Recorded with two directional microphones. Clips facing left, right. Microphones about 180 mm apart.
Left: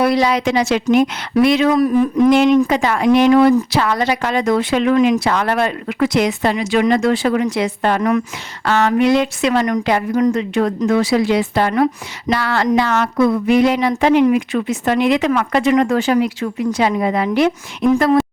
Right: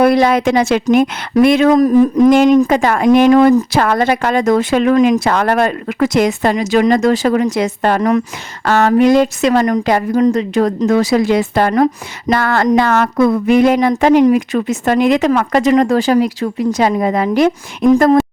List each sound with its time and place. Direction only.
0.0 s a woman's voice: 50° right (ahead or behind)